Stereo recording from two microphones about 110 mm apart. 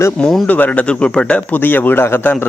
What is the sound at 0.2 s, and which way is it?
Speech, centre (ahead or behind).